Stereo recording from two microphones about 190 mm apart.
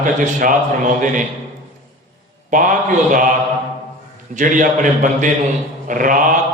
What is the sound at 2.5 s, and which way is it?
Speech, 45° right (ahead or behind).